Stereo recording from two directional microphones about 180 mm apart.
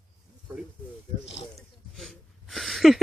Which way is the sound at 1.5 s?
Centre (ahead or behind).